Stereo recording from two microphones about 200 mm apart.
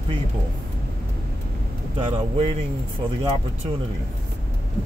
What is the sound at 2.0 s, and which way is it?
Speech, 25° right (ahead or behind).